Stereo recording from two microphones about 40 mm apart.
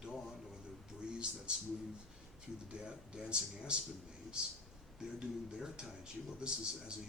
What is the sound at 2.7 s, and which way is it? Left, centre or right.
Speech, right.